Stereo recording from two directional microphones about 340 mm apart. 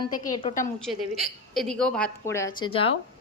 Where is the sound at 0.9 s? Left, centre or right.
Centre.